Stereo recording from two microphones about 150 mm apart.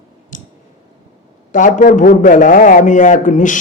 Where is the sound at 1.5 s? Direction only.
60° left (ahead or behind).